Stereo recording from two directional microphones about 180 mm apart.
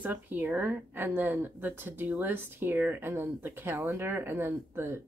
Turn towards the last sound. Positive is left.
turn(degrees=-15)  # may be behind; listen again after turning